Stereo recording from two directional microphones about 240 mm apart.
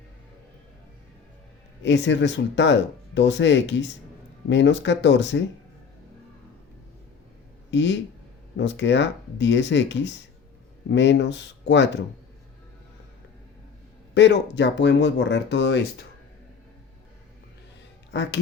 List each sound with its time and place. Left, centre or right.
1.8 s speech: left
7.7 s speech: left
14.1 s speech: left
18.1 s speech: left